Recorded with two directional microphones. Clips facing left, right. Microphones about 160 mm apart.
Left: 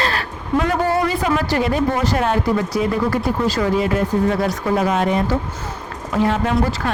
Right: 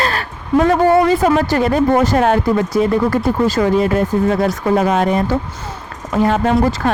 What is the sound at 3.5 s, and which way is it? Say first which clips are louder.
Speech: right 4 dB; 45° right (ahead or behind).